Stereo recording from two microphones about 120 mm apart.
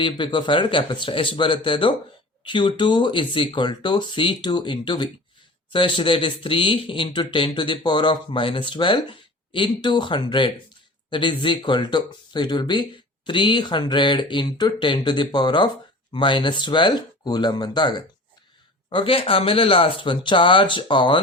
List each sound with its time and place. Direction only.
0.0 s speech: 40° left (ahead or behind)